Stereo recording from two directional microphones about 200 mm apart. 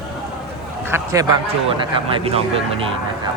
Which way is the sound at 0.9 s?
15° right (ahead or behind).